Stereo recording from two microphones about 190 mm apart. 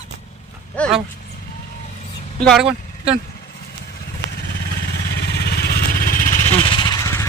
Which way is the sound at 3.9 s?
55° left (ahead or behind).